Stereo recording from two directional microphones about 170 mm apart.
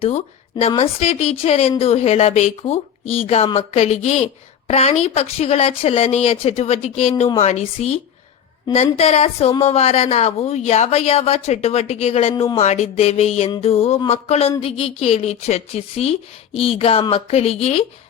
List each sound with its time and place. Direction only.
0.8 s a woman's voice: 40° left (ahead or behind)